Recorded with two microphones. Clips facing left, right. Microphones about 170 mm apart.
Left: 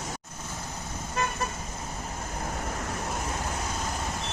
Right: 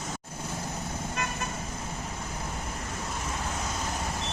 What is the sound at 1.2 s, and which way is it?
Vehicle, 30° left (ahead or behind).